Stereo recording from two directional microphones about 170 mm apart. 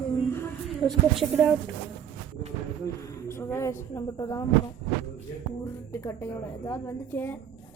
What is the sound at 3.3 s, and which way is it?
A woman's voice, 15° left (ahead or behind).